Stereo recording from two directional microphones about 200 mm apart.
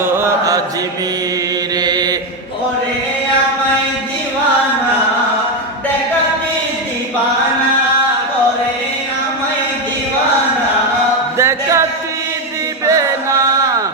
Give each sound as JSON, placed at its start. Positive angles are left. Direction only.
{"t": 0.0, "sound": "chant", "side_deg": -15}
{"t": 1.8, "sound": "mantra", "side_deg": -20}
{"t": 11.3, "sound": "music", "side_deg": -15}
{"t": 12.8, "sound": "chant", "side_deg": -15}